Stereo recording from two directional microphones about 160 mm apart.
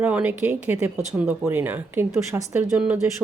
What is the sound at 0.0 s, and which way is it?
Speech, 10° right (ahead or behind).